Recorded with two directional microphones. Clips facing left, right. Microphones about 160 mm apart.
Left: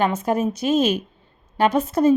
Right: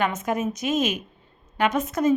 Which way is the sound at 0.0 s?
30° left (ahead or behind).